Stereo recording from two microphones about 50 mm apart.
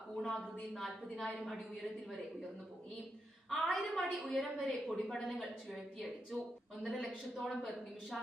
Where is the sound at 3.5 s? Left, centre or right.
Centre.